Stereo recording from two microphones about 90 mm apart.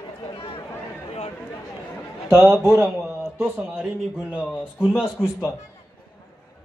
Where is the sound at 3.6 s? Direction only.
10° right (ahead or behind).